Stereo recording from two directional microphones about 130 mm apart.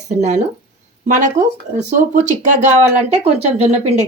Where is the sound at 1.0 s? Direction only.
80° right.